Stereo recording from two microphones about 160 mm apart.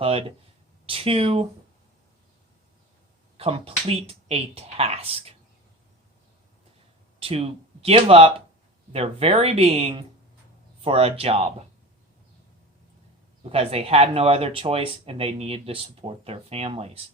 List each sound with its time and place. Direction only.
0.0 s speech: 40° right (ahead or behind)
3.3 s speech: 35° right (ahead or behind)
7.2 s speech: 35° right (ahead or behind)
13.4 s speech: 40° right (ahead or behind)